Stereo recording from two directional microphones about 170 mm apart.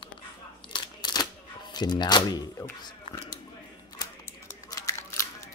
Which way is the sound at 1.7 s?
25° left (ahead or behind).